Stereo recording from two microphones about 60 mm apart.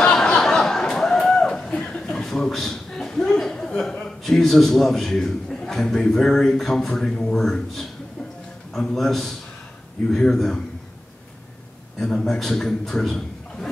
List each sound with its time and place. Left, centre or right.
0.0 s chatter: centre
1.7 s chuckle: centre
3.8 s a man's voice: centre
4.2 s a man's voice: centre
12.0 s a man's voice: centre